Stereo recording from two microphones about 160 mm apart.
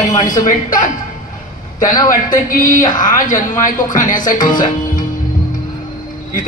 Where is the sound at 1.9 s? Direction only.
25° left (ahead or behind).